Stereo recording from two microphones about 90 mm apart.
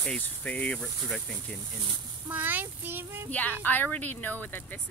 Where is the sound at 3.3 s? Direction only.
15° left (ahead or behind).